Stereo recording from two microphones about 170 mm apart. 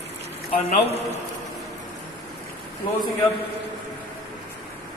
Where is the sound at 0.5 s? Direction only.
40° left (ahead or behind).